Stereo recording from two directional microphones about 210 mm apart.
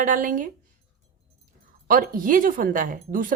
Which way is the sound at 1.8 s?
40° right (ahead or behind).